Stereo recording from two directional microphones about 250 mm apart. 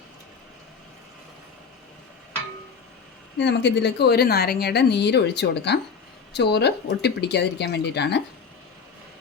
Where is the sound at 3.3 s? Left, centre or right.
Left.